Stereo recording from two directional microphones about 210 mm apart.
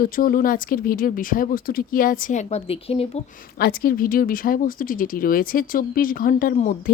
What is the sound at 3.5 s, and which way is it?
Speech, 45° left (ahead or behind).